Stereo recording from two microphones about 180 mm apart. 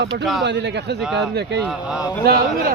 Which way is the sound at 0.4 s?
75° right (ahead or behind).